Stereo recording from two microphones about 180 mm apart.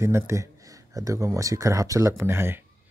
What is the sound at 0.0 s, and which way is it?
Speech, 15° right (ahead or behind).